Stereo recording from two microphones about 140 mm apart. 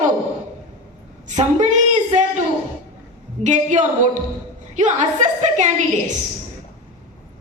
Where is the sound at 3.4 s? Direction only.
60° right (ahead or behind).